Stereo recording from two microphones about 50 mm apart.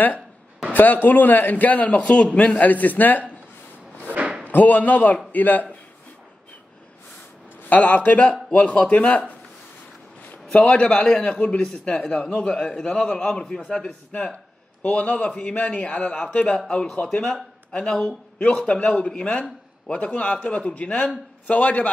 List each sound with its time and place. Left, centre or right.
0.7 s a man's voice: left
4.5 s a man's voice: left
7.6 s a man's voice: left
10.5 s a man's voice: left
12.5 s a man's voice: centre; by 21.8 s left